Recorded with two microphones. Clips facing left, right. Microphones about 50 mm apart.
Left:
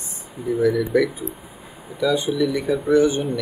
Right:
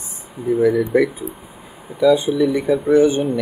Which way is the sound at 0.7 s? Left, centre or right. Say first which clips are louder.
Right 3 dB; right.